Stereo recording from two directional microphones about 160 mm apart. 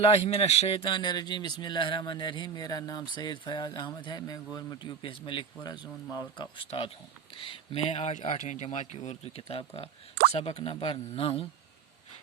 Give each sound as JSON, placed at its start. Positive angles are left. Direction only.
{"t": 0.0, "sound": "speech", "side_deg": 40}